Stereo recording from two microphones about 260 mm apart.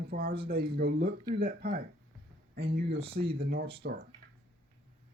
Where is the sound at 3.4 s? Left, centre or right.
Right.